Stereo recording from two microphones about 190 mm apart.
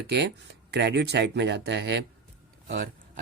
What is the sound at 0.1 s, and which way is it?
Speech, 60° right (ahead or behind).